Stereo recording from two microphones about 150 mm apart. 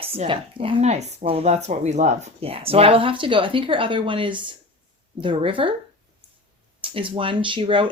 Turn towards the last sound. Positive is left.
turn(degrees=-35)  # may be behind; listen again after turning